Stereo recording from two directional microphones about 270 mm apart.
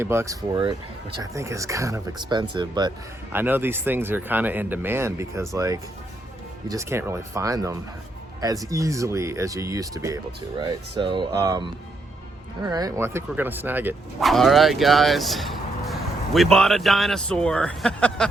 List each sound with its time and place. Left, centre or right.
0.0 s speech: centre
12.6 s speech: centre